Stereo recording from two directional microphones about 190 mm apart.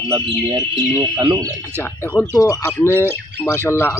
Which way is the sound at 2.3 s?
15° left (ahead or behind).